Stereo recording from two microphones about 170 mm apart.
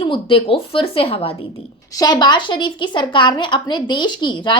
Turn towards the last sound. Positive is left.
turn(degrees=25)  # may be behind; listen again after turning